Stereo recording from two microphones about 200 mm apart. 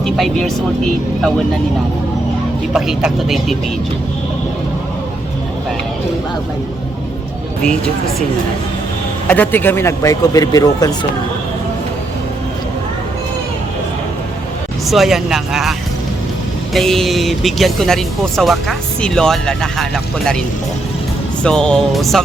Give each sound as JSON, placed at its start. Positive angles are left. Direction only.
{"t": 0.0, "sound": "speech", "side_deg": 0}
{"t": 2.7, "sound": "speech", "side_deg": 0}
{"t": 9.3, "sound": "a man's voice", "side_deg": 10}
{"t": 14.8, "sound": "speech", "side_deg": 0}
{"t": 16.7, "sound": "speech", "side_deg": 0}
{"t": 21.4, "sound": "speech", "side_deg": 5}